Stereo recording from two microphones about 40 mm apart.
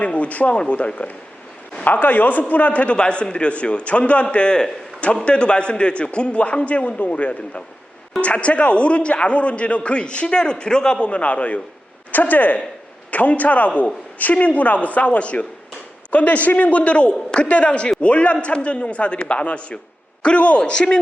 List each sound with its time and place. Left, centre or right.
0.0 s speech: left
1.8 s a man's voice: left